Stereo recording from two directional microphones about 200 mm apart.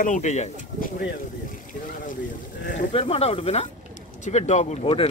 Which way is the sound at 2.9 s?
30° left (ahead or behind).